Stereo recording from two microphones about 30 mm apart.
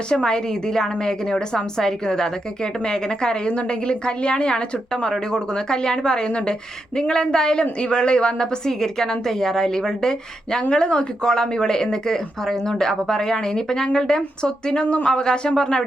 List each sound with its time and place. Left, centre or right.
0.1 s speech: left
8.6 s a woman's voice: centre